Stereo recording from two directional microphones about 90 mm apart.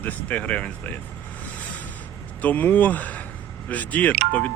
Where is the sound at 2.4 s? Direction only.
20° left (ahead or behind).